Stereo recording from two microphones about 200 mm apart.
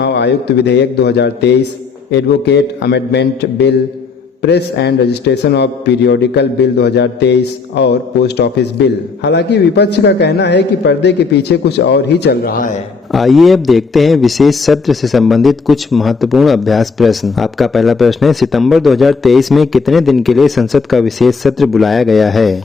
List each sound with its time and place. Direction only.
0.0 s a man's voice: 60° left (ahead or behind)
13.1 s a man's voice: centre (ahead or behind)